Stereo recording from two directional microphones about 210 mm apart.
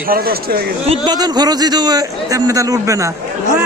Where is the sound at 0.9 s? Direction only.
20° right (ahead or behind).